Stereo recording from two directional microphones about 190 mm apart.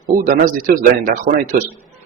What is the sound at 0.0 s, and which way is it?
Speech, 45° right (ahead or behind).